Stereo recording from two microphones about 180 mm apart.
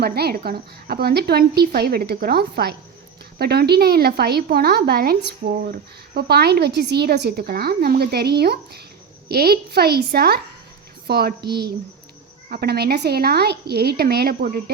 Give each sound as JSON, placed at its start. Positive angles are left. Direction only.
{"t": 0.0, "sound": "a woman's voice", "side_deg": -60}